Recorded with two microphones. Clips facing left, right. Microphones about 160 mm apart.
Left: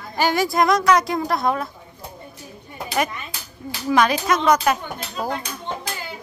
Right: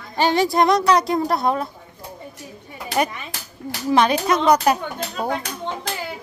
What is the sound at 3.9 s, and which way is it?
Speech, 30° right (ahead or behind).